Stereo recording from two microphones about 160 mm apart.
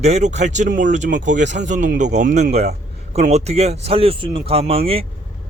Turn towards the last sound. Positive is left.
turn(degrees=-35)  # may be behind; listen again after turning